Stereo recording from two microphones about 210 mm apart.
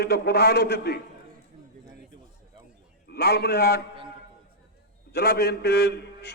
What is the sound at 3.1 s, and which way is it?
Speech, 50° left (ahead or behind).